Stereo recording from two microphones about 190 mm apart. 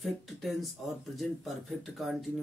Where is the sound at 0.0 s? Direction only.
Centre (ahead or behind).